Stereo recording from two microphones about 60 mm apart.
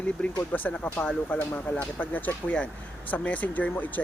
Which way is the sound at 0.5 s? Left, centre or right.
Left.